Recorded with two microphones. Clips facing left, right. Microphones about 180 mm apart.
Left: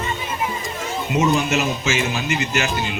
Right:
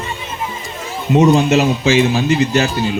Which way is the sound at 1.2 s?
35° right (ahead or behind).